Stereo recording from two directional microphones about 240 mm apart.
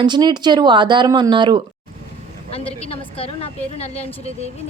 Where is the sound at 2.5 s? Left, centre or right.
Left.